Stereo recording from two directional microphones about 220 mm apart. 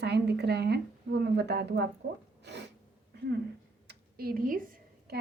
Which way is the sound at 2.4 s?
50° right (ahead or behind).